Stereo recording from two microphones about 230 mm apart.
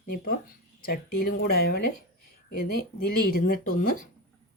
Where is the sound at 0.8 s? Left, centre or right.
Left.